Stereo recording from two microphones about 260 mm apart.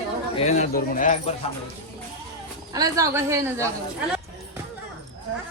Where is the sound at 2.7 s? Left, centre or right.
Centre.